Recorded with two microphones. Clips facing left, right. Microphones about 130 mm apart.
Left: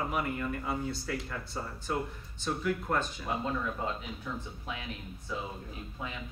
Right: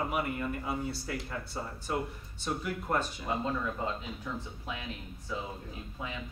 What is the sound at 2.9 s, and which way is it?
Speech, 5° right (ahead or behind).